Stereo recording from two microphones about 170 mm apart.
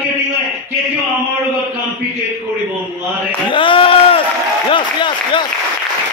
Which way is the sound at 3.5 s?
30° left (ahead or behind).